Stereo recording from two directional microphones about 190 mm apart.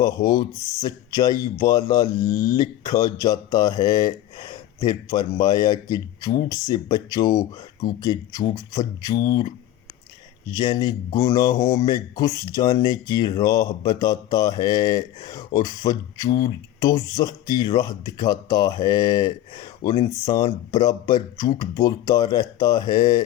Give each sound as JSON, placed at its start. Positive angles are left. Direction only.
{"t": 0.0, "sound": "speech", "side_deg": 20}
{"t": 10.6, "sound": "speech", "side_deg": 20}